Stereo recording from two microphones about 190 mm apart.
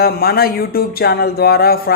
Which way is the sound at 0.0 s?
55° left (ahead or behind).